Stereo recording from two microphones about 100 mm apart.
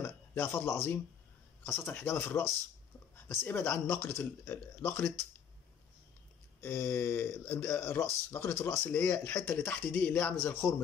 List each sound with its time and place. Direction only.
0.0 s speech: 25° left (ahead or behind)
6.6 s speech: 25° left (ahead or behind)